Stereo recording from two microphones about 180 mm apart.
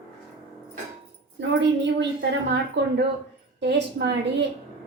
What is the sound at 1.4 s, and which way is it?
Wind chime, 80° right.